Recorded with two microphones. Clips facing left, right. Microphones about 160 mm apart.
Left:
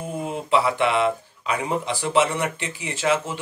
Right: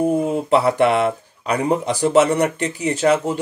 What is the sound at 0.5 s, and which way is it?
Speech, 45° right (ahead or behind).